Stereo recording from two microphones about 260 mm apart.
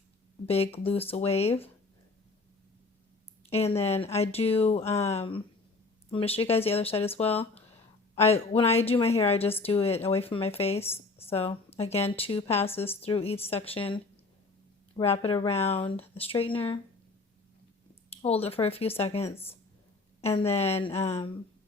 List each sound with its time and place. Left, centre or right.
0.4 s speech: left
3.5 s speech: left
18.1 s speech: left
20.4 s speech: left